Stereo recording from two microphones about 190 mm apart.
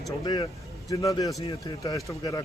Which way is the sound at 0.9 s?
15° left (ahead or behind).